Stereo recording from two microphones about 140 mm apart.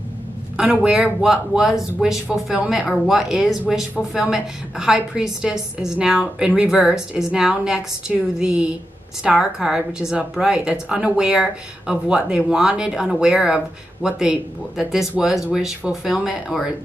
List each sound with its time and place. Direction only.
0.6 s a woman's voice: 5° right (ahead or behind)